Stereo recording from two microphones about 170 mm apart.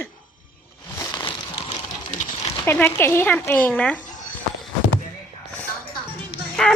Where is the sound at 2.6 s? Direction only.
15° left (ahead or behind).